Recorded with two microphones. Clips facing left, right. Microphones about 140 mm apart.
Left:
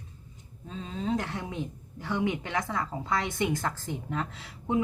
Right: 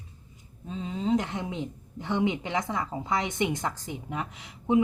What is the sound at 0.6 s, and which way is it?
Speech, 15° right (ahead or behind).